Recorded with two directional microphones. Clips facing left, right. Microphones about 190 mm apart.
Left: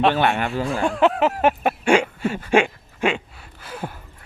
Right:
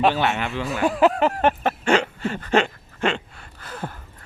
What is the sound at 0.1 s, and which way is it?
Speech, 55° left (ahead or behind).